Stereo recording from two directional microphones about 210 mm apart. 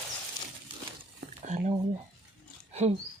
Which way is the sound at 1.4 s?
35° right (ahead or behind).